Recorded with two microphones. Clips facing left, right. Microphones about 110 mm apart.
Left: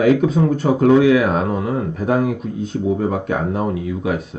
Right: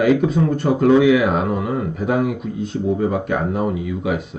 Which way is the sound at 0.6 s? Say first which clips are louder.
Left 1 dB; 50° left (ahead or behind).